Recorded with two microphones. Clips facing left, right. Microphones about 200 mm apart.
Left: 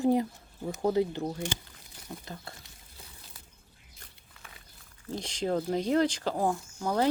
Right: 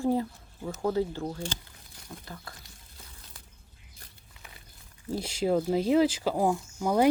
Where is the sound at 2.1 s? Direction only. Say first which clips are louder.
Left 3 dB; 35° left (ahead or behind).